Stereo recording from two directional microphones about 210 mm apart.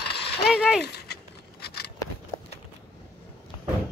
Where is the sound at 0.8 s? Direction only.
50° left (ahead or behind).